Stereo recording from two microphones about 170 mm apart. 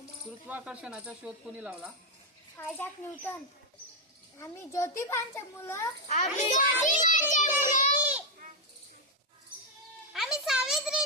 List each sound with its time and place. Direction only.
0.4 s speech: 10° right (ahead or behind)
2.6 s a child's voice: 10° left (ahead or behind)
4.4 s a child's voice: 15° left (ahead or behind)
6.1 s a child's voice: 45° left (ahead or behind)
10.1 s a sound: centre (ahead or behind)